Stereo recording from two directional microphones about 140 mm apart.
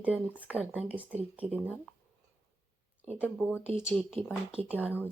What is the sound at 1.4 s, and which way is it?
Speech, 50° right (ahead or behind).